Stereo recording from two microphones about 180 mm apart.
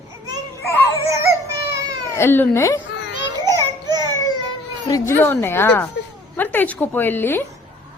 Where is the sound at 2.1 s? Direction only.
15° left (ahead or behind).